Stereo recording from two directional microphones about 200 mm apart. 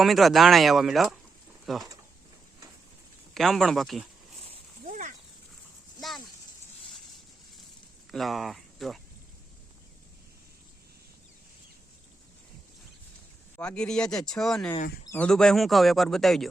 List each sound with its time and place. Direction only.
0.0 s speech: centre (ahead or behind)
3.3 s speech: centre (ahead or behind)
4.9 s a sound: 40° right (ahead or behind)
6.0 s a sound: centre (ahead or behind)
8.1 s speech: centre (ahead or behind)
13.6 s speech: 5° left (ahead or behind)